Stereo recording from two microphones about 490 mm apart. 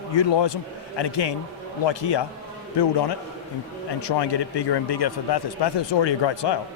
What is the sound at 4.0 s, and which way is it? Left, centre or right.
A man's voice, left.